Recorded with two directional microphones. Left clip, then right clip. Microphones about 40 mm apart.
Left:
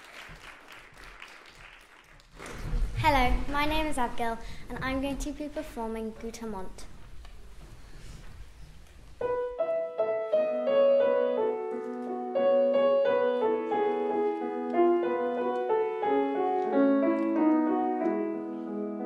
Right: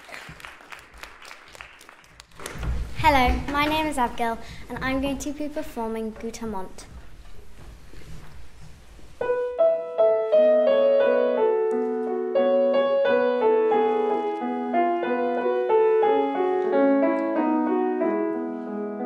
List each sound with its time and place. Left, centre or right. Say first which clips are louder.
3.0 s a woman's voice: right 6 dB; centre
9.2 s music: right 8 dB; right
17.5 s music: right 3 dB; right